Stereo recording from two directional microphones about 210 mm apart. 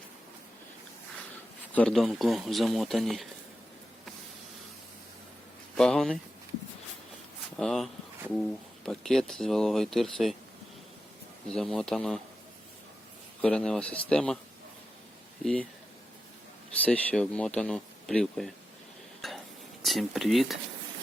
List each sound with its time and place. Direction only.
1.7 s speech: 5° left (ahead or behind)
5.7 s speech: 5° left (ahead or behind)
7.5 s speech: centre (ahead or behind)
11.4 s speech: 5° left (ahead or behind)
13.4 s speech: 5° left (ahead or behind)
16.8 s speech: 5° left (ahead or behind)
19.2 s a sound: centre (ahead or behind)
19.8 s speech: centre (ahead or behind)